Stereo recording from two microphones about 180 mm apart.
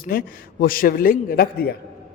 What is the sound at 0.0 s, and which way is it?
A man's voice, 55° left (ahead or behind).